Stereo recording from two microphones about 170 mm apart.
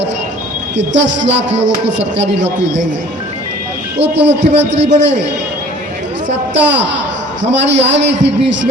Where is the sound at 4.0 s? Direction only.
90° right.